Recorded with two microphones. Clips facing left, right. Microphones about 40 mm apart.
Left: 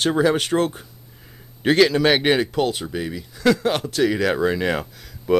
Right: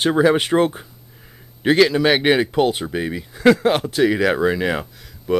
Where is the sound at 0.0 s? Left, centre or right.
Centre.